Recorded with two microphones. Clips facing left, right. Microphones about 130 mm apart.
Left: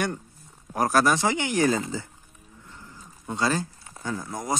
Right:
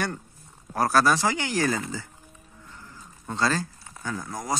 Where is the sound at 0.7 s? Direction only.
20° left (ahead or behind).